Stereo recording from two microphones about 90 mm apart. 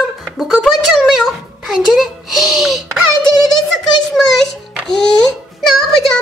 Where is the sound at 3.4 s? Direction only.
Centre (ahead or behind).